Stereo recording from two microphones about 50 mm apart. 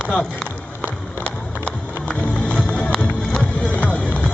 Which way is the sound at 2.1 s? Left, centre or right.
Left.